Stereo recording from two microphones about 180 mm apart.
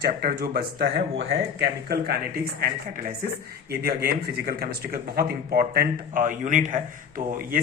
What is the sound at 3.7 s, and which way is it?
Speech, 60° right (ahead or behind).